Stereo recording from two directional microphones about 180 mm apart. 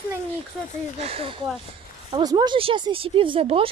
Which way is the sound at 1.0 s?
35° right (ahead or behind).